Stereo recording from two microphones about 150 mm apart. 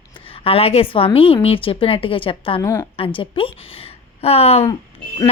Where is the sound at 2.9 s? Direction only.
35° left (ahead or behind).